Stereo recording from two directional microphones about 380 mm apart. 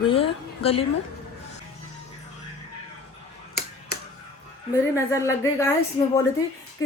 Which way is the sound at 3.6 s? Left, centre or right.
Left.